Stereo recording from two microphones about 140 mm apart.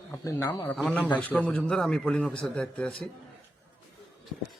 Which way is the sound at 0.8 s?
Centre (ahead or behind).